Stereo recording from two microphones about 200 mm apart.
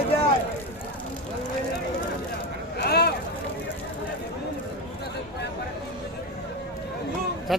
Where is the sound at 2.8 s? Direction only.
55° left (ahead or behind).